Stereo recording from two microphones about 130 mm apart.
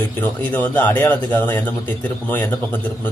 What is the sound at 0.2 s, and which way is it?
Speech, 15° left (ahead or behind).